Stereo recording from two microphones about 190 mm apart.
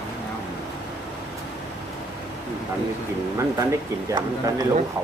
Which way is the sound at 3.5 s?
15° right (ahead or behind).